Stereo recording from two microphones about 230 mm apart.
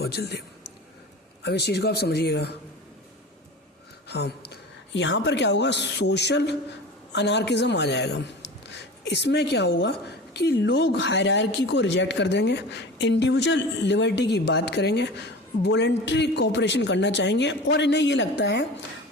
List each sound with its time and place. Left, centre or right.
0.0 s a woman's voice: left
1.5 s a woman's voice: left
4.1 s a woman's voice: left